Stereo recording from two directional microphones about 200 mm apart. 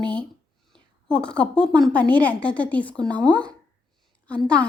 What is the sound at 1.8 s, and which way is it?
A woman's voice, 5° left (ahead or behind).